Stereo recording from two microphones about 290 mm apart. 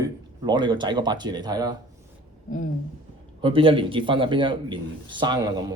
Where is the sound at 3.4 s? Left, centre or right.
Centre.